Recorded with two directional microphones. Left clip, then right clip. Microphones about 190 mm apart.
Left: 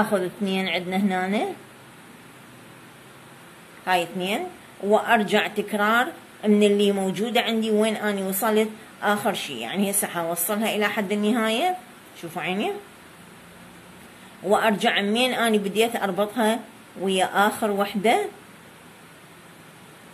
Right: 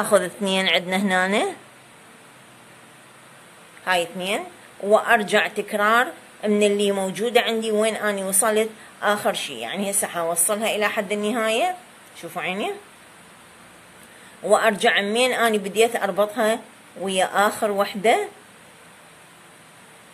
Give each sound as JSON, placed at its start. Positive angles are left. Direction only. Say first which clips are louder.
{"t": 0.1, "sound": "a woman's voice", "louder": "right 6 dB", "side_deg": -40}
{"t": 3.8, "sound": "a woman's voice", "louder": "right 1 dB", "side_deg": -30}
{"t": 14.5, "sound": "a woman's voice", "louder": "right 3 dB", "side_deg": -25}